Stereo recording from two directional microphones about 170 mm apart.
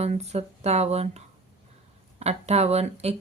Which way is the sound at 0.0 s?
40° right (ahead or behind).